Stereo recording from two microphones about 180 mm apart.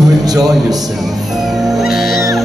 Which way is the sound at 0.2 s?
20° right (ahead or behind).